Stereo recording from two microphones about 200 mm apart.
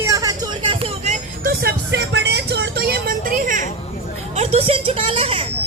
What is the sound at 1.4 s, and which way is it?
Vehicle, 50° right (ahead or behind).